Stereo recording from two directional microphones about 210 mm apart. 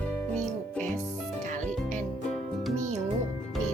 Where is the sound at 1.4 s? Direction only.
35° right (ahead or behind).